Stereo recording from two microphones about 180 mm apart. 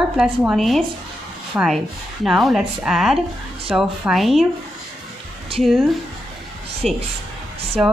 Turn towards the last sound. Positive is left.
turn(degrees=-5)  # may be behind; listen again after turning